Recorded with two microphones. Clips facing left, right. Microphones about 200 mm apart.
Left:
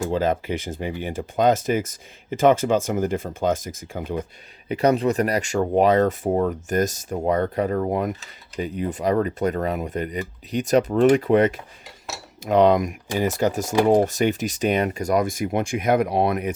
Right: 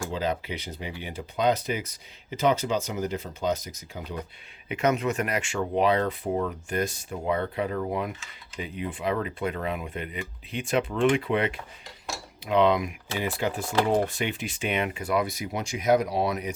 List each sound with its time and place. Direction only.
0.1 s speech: 50° left (ahead or behind)
4.7 s speech: 35° left (ahead or behind); by 16.6 s 55° left (ahead or behind)